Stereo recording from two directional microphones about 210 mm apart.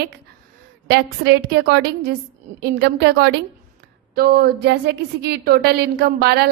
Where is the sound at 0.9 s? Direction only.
50° right (ahead or behind).